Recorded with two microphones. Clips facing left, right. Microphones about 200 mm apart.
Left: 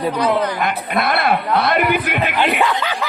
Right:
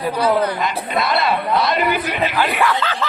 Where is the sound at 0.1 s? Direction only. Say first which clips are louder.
Right 3 dB; 10° right (ahead or behind).